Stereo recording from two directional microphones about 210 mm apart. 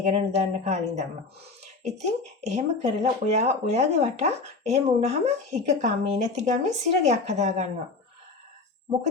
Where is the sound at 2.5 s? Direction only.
30° right (ahead or behind).